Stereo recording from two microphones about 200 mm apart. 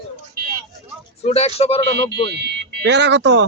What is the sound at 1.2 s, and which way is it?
Speech, 30° left (ahead or behind).